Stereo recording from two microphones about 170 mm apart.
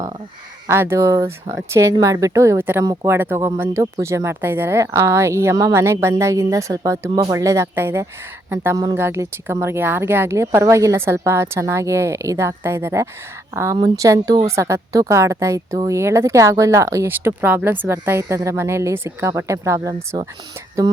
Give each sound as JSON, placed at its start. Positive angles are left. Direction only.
{"t": 0.7, "sound": "a woman's voice", "side_deg": -15}